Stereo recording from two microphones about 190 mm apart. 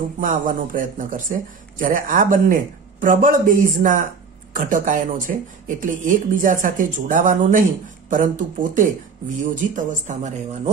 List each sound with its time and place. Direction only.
0.2 s speech: 45° right (ahead or behind)